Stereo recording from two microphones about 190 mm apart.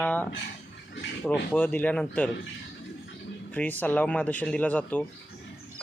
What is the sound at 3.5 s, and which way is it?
Speech, 10° left (ahead or behind).